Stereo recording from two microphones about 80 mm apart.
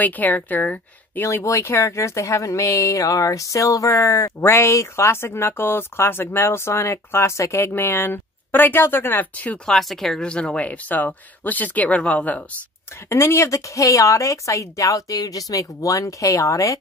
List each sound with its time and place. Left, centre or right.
0.0 s speech: left
1.2 s speech: left
9.7 s speech: centre
13.1 s speech: left